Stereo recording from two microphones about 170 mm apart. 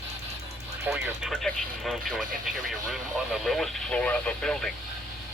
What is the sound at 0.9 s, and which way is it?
Speech, 5° right (ahead or behind).